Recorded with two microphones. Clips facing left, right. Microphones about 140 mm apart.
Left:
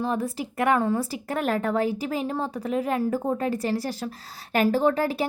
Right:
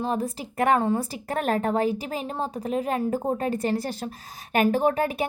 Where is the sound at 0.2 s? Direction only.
35° right (ahead or behind).